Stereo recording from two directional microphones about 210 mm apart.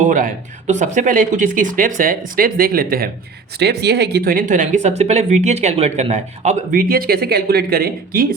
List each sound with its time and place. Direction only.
0.0 s speech: 40° right (ahead or behind)